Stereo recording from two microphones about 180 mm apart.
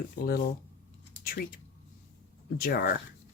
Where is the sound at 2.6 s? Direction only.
55° left (ahead or behind).